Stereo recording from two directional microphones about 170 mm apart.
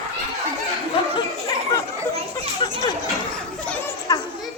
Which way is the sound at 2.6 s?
30° left (ahead or behind).